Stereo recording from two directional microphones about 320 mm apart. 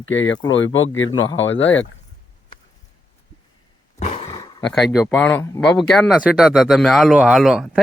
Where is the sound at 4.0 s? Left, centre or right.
Centre.